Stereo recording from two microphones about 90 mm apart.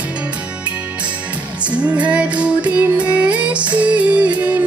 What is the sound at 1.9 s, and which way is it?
Music, 15° right (ahead or behind).